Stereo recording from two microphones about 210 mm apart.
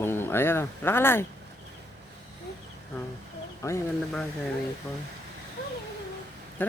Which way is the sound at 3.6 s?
15° left (ahead or behind).